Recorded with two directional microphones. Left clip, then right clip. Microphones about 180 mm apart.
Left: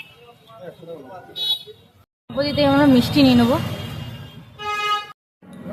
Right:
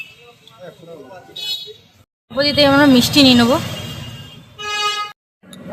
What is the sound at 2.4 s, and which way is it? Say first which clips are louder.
Speech: right 5 dB; 5° right (ahead or behind).